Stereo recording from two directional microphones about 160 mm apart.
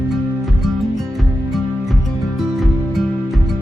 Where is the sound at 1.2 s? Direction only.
Centre (ahead or behind).